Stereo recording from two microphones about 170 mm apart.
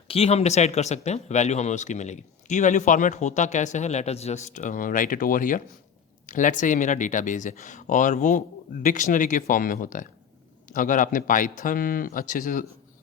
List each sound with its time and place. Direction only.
0.1 s speech: 35° left (ahead or behind); by 12.6 s 50° left (ahead or behind)